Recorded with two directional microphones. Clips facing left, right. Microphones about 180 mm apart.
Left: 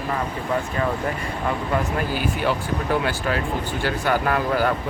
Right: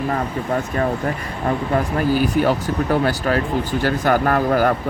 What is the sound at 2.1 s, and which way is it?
Speech, 45° right (ahead or behind).